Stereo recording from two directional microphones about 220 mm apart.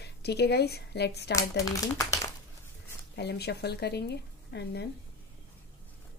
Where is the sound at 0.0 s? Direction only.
50° left (ahead or behind).